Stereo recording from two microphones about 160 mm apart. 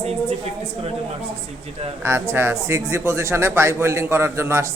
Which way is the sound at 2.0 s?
15° right (ahead or behind).